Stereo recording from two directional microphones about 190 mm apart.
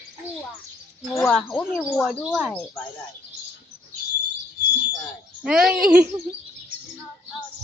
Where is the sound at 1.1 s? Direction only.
10° left (ahead or behind).